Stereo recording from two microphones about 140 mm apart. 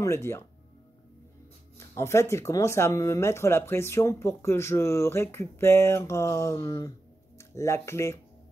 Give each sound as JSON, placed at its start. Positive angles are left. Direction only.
{"t": 0.0, "sound": "speech", "side_deg": 20}
{"t": 1.8, "sound": "speech", "side_deg": 20}